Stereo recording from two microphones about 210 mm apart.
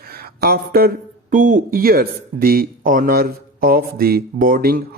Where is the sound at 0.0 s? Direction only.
45° right (ahead or behind).